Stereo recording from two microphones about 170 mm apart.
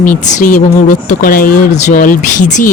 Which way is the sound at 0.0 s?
50° left (ahead or behind).